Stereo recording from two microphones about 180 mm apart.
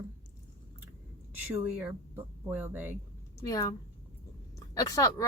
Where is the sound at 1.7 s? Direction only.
10° right (ahead or behind).